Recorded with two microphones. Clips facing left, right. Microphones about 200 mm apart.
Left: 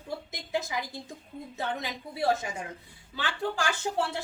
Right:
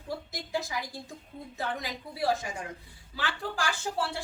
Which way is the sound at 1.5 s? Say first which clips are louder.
Left 1 dB; 25° left (ahead or behind).